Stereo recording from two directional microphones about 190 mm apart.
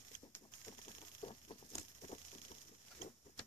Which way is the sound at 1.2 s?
25° left (ahead or behind).